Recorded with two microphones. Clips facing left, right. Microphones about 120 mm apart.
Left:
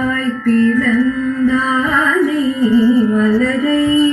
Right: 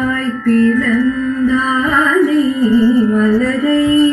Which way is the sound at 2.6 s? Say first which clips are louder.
Left 2 dB; 30° right (ahead or behind).